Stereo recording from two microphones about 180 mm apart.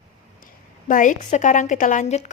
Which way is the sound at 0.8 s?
45° left (ahead or behind).